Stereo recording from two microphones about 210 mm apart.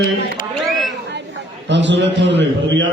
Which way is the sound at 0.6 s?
Centre (ahead or behind).